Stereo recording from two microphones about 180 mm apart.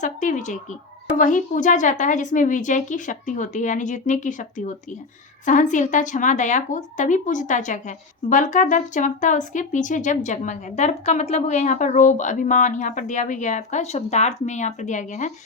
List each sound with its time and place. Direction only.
0.0 s speech: 45° left (ahead or behind)